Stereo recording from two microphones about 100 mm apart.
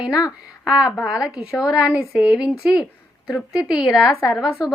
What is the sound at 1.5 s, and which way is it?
Speech, 35° left (ahead or behind).